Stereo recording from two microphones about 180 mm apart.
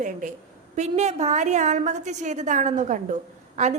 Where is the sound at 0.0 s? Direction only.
45° right (ahead or behind).